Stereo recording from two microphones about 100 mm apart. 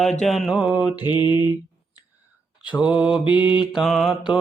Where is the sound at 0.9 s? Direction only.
50° left (ahead or behind).